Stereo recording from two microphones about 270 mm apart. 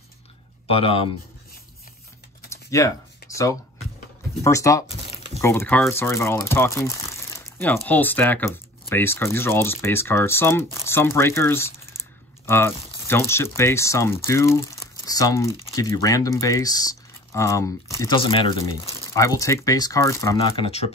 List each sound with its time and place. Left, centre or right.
0.7 s speech: left
2.5 s typing: centre
4.4 s speech: centre
5.1 s a sound: left
5.4 s speech: centre